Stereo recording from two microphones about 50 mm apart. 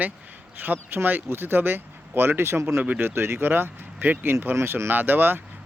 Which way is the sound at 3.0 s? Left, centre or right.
Right.